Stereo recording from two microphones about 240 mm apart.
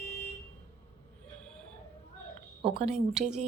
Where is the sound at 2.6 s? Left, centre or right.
Right.